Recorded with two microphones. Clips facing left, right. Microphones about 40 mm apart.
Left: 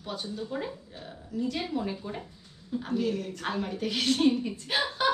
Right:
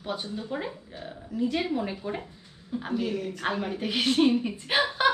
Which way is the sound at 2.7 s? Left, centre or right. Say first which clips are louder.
Even; centre.